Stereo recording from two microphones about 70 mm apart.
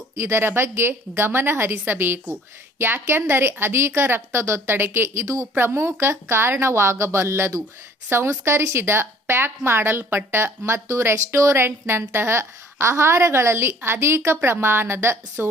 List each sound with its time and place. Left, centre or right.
0.2 s a woman's voice: right
5.5 s a woman's voice: right